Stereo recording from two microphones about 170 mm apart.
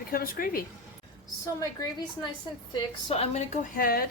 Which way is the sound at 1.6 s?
25° left (ahead or behind).